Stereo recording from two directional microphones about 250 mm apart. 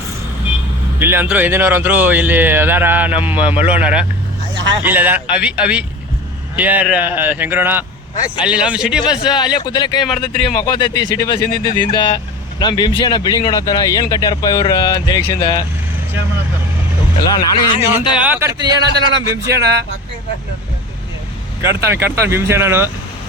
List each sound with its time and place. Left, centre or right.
0.9 s speech: centre
9.1 s speech: centre
17.2 s speech: centre
18.1 s speech: centre
19.5 s speech: right
21.6 s speech: centre